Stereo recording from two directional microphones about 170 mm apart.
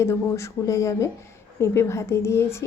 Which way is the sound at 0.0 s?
15° left (ahead or behind).